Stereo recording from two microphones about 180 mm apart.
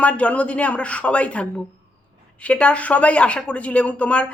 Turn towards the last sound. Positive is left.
turn(degrees=5)  # may be behind; listen again after turning